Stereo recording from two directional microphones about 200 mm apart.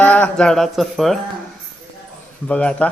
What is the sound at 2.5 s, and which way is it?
Speech, 5° left (ahead or behind).